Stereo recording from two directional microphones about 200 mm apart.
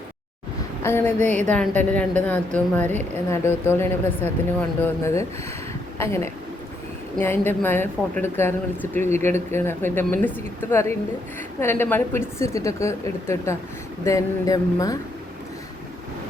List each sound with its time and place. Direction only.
0.8 s a woman's voice: 10° left (ahead or behind)